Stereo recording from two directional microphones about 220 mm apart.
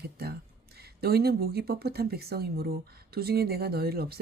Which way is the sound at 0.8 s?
45° right (ahead or behind).